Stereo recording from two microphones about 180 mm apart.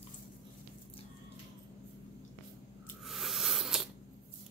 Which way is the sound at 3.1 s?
Centre (ahead or behind).